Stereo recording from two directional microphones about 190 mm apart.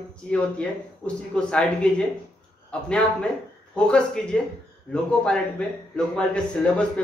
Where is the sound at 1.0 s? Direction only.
5° left (ahead or behind).